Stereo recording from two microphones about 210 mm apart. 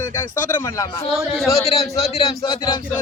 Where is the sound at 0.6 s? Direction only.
20° left (ahead or behind).